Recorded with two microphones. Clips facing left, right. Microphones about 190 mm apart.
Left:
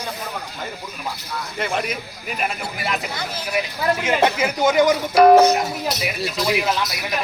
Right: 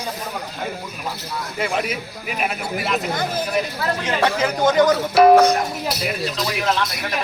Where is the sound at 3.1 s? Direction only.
50° right (ahead or behind).